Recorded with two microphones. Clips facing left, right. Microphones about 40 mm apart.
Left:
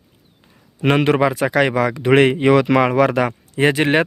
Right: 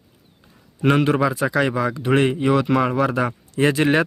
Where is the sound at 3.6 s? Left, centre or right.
Left.